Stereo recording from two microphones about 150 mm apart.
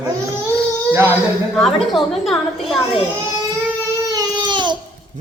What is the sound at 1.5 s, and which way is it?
A woman's voice, centre (ahead or behind).